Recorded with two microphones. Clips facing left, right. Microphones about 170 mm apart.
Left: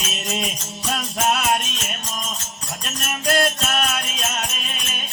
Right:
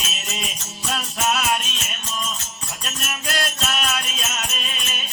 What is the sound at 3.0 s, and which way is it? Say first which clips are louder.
Music: left 8 dB; 50° left (ahead or behind).